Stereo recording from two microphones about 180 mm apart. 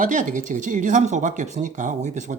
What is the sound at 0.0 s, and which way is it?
Speech, 45° right (ahead or behind).